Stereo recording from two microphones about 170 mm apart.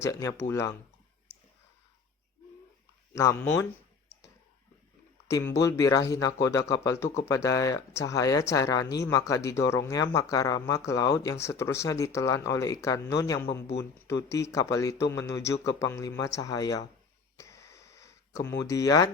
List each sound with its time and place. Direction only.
0.0 s speech: 15° left (ahead or behind)
3.1 s speech: 15° left (ahead or behind)
5.3 s speech: 15° left (ahead or behind)
17.3 s a sound: 15° left (ahead or behind)
18.6 s speech: 20° left (ahead or behind)